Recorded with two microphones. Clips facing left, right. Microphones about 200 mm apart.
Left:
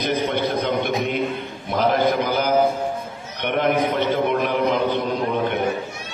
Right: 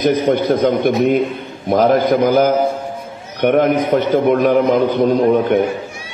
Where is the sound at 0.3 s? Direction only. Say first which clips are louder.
Right 8 dB; 50° right (ahead or behind).